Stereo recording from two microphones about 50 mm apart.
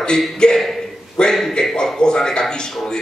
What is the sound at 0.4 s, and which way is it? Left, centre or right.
A man's voice, centre.